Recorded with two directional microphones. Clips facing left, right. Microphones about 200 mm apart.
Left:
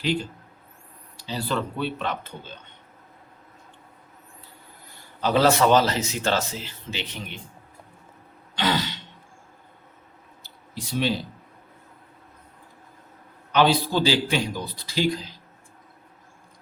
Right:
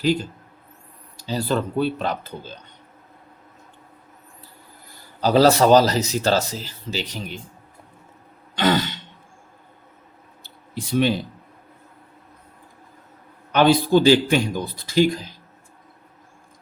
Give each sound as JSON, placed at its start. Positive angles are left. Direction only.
{"t": 0.0, "sound": "speech", "side_deg": -40}
{"t": 5.2, "sound": "speech", "side_deg": -35}
{"t": 8.5, "sound": "throat clearing", "side_deg": -50}
{"t": 10.4, "sound": "a sound", "side_deg": -55}
{"t": 13.5, "sound": "speech", "side_deg": -50}